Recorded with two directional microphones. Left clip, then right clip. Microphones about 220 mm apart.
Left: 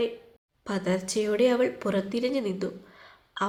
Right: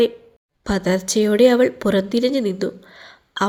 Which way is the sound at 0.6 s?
25° right (ahead or behind).